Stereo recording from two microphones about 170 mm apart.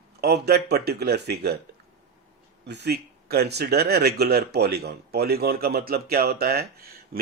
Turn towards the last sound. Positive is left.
turn(degrees=-65)  # may be behind; listen again after turning